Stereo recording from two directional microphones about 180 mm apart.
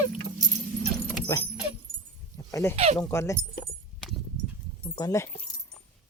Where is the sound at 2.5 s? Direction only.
15° left (ahead or behind).